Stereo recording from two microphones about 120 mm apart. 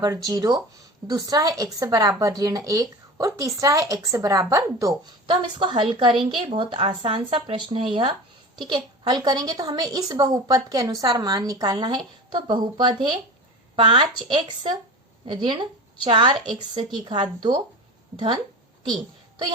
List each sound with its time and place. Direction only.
0.0 s a woman's voice: 35° right (ahead or behind)
5.3 s a woman's voice: 40° right (ahead or behind)